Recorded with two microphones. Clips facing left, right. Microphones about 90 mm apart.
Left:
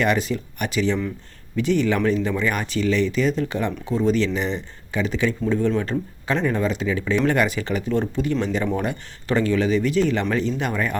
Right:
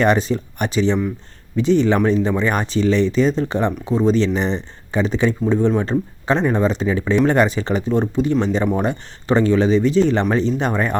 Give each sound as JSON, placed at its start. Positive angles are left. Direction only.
{"t": 0.0, "sound": "speech", "side_deg": -30}